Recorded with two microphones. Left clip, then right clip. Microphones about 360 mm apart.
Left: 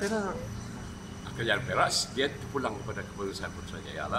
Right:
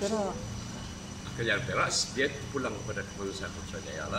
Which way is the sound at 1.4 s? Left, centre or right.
Centre.